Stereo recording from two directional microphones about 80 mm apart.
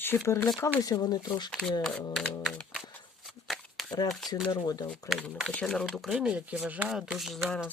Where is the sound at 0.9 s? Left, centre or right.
Left.